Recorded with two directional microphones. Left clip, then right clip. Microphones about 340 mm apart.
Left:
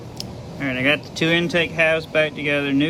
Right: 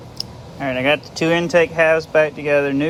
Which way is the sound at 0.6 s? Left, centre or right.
Centre.